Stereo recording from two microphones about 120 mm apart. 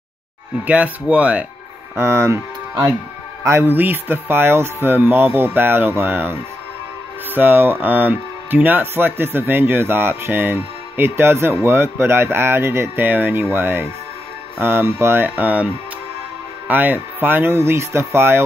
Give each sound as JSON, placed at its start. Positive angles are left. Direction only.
{"t": 0.7, "sound": "speech", "side_deg": -10}
{"t": 2.0, "sound": "speech", "side_deg": -20}